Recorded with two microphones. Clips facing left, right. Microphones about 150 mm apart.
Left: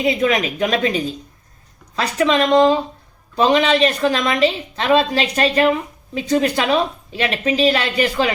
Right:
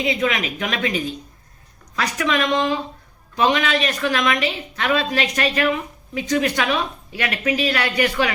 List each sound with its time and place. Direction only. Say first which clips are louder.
0.0 s a woman's voice: left 4 dB; 40° left (ahead or behind)